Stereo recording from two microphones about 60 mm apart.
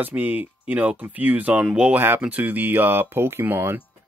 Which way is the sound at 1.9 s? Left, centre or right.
Right.